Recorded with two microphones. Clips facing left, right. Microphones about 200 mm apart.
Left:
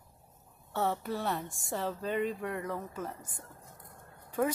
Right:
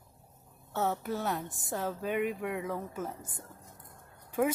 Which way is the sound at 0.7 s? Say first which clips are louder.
Even; centre (ahead or behind).